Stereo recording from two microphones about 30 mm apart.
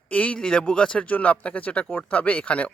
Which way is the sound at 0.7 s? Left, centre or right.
Left.